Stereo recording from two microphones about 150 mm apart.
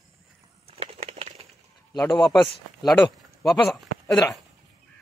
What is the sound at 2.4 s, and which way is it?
Speech, centre (ahead or behind).